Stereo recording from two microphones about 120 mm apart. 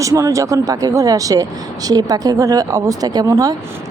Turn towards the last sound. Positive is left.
turn(degrees=-30)  # may be behind; listen again after turning